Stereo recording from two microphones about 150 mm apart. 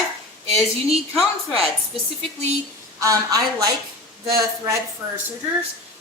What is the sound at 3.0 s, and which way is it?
A woman's voice, 25° right (ahead or behind).